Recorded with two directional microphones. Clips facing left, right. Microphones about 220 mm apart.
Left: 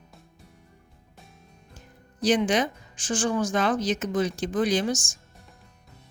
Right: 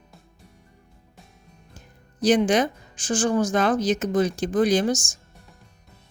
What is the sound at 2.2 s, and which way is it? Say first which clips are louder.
Speech: right 3 dB; 45° right (ahead or behind).